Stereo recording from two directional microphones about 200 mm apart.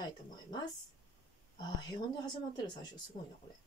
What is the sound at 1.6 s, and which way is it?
Speech, 20° left (ahead or behind).